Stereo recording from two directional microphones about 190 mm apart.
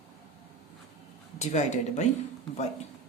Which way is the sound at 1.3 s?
40° left (ahead or behind).